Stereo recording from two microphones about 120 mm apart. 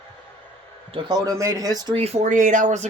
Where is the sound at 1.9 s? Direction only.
60° right (ahead or behind); by 2.8 s 85° right.